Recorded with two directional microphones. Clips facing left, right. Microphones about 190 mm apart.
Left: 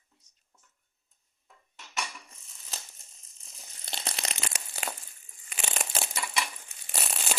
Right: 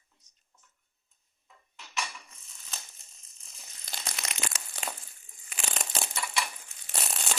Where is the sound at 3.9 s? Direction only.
30° left (ahead or behind).